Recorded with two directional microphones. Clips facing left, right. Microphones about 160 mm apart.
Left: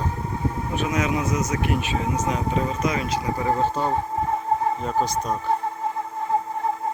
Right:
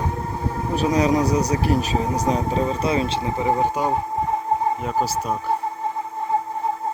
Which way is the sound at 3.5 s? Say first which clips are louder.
Right 2 dB; 15° right (ahead or behind).